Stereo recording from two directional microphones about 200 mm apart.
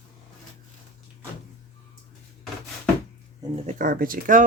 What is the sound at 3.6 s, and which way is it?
Speech, 45° right (ahead or behind).